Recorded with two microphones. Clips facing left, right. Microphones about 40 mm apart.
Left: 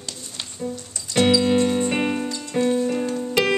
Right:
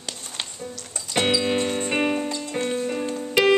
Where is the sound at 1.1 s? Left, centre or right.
Centre.